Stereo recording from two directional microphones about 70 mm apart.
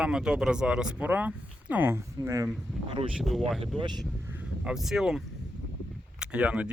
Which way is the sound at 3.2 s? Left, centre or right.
Centre.